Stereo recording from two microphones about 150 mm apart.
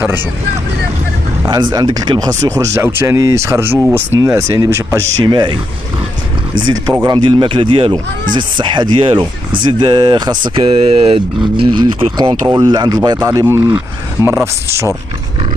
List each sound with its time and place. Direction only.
1.4 s speech: 30° right (ahead or behind)
5.2 s speech: 30° right (ahead or behind)